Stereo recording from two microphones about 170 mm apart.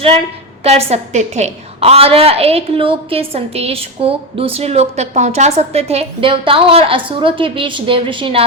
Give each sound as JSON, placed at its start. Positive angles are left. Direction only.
{"t": 0.6, "sound": "a woman's voice", "side_deg": -35}